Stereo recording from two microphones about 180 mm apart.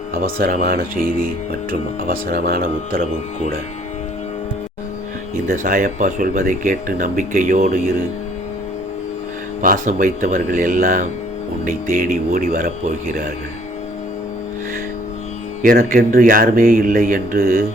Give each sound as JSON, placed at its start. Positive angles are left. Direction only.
{"t": 0.1, "sound": "speech", "side_deg": -55}
{"t": 5.5, "sound": "speech", "side_deg": -50}
{"t": 9.6, "sound": "speech", "side_deg": -45}
{"t": 15.6, "sound": "speech", "side_deg": -50}